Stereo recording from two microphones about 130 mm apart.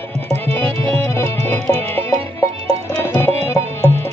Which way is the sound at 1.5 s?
15° left (ahead or behind).